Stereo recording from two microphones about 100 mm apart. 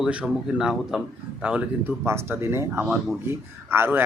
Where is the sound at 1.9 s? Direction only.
25° right (ahead or behind).